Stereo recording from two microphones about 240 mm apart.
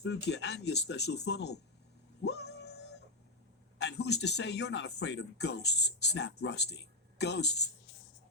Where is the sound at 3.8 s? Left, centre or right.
Left.